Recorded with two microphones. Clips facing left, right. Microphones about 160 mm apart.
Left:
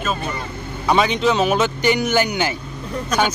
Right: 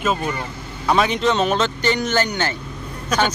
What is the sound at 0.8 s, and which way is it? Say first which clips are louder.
Speech: left 1 dB; centre (ahead or behind).